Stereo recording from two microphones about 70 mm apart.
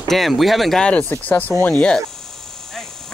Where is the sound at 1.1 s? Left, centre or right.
Left.